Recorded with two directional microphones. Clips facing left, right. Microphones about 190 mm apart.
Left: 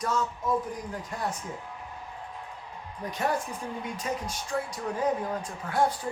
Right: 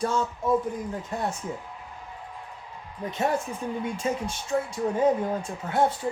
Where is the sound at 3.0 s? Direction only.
25° right (ahead or behind).